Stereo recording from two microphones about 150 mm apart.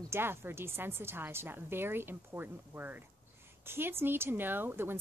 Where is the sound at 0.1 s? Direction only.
15° right (ahead or behind).